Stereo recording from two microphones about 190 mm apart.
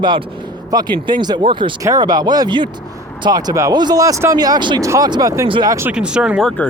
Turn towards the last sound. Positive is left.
turn(degrees=5)  # may be behind; listen again after turning